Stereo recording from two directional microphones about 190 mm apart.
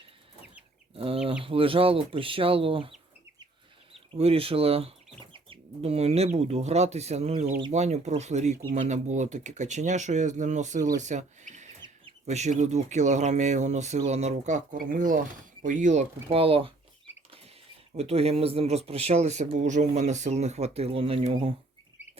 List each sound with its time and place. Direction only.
0.9 s chicken: 30° right (ahead or behind)
1.3 s speech: 30° right (ahead or behind)
4.1 s speech: 30° right (ahead or behind)
17.9 s speech: 35° right (ahead or behind)